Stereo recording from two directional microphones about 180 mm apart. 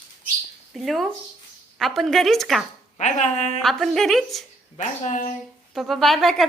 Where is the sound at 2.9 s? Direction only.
40° left (ahead or behind).